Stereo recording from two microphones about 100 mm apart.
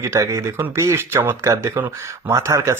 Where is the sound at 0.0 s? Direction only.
30° right (ahead or behind).